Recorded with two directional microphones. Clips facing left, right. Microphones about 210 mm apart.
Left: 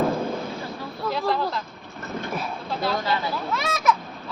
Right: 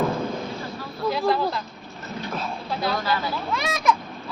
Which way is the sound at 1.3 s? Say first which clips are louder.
Right 1 dB; 5° right (ahead or behind).